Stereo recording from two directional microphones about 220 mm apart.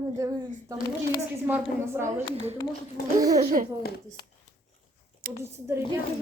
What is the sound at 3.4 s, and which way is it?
Speech, 35° right (ahead or behind).